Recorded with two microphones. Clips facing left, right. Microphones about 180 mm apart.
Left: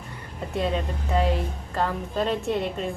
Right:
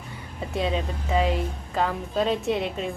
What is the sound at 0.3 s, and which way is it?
A woman's voice, centre (ahead or behind).